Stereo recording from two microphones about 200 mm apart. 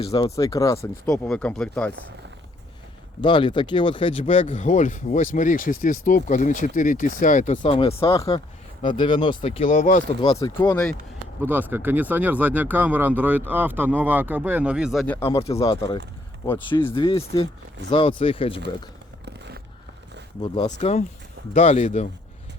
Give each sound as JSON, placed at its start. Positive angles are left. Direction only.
{"t": 0.0, "sound": "speech", "side_deg": 30}
{"t": 0.3, "sound": "speech", "side_deg": 15}
{"t": 1.0, "sound": "speech", "side_deg": 5}
{"t": 3.2, "sound": "speech", "side_deg": 25}
{"t": 4.3, "sound": "speech", "side_deg": 40}
{"t": 7.6, "sound": "speech", "side_deg": 25}
{"t": 8.1, "sound": "speech", "side_deg": 15}
{"t": 9.6, "sound": "speech", "side_deg": 40}
{"t": 10.3, "sound": "speech", "side_deg": 20}
{"t": 11.4, "sound": "speech", "side_deg": -10}
{"t": 15.0, "sound": "speech", "side_deg": 10}
{"t": 15.4, "sound": "speech", "side_deg": 30}
{"t": 16.9, "sound": "speech", "side_deg": 25}
{"t": 20.7, "sound": "speech", "side_deg": 35}